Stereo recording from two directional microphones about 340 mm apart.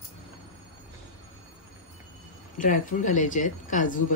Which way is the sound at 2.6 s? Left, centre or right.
Left.